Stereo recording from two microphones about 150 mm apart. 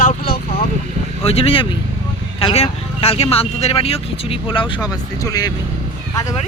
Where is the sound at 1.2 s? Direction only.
40° left (ahead or behind).